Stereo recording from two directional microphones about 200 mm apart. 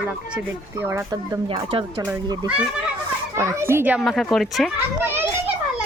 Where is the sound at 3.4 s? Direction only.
15° right (ahead or behind).